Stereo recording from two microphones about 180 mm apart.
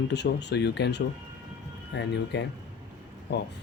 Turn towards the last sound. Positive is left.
turn(degrees=70)  # may be behind; listen again after turning